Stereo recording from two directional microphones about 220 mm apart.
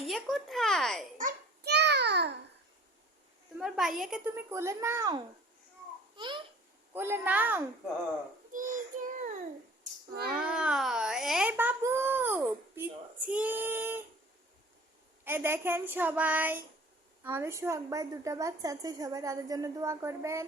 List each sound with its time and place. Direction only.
0.0 s a child's voice: centre (ahead or behind)
1.2 s babbling: 50° right (ahead or behind)
3.6 s a child's voice: centre (ahead or behind)
4.5 s a woman's voice: 10° right (ahead or behind)
6.9 s a woman's voice: 10° right (ahead or behind)
8.5 s child singing: 35° right (ahead or behind)
10.2 s baby cry: 5° right (ahead or behind)
15.2 s a woman's voice: 10° right (ahead or behind)